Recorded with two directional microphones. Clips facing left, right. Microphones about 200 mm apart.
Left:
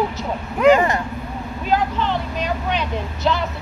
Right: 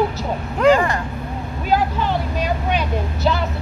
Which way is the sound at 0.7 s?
20° left (ahead or behind).